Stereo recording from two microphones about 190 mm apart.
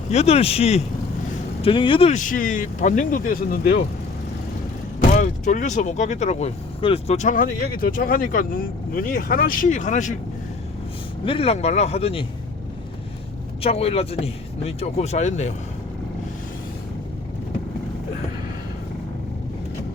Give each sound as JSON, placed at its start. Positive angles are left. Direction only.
{"t": 0.1, "sound": "speech", "side_deg": 35}
{"t": 4.9, "sound": "speech", "side_deg": 40}
{"t": 11.3, "sound": "speech", "side_deg": 30}
{"t": 13.6, "sound": "speech", "side_deg": 30}